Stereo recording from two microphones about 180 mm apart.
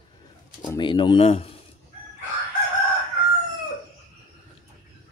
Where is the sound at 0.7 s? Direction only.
25° left (ahead or behind).